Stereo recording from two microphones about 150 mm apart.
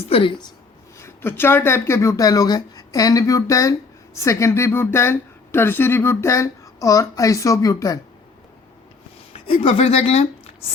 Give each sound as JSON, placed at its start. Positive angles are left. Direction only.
{"t": 0.0, "sound": "a woman's voice", "side_deg": 40}
{"t": 0.9, "sound": "speech", "side_deg": 15}
{"t": 9.3, "sound": "speech", "side_deg": 40}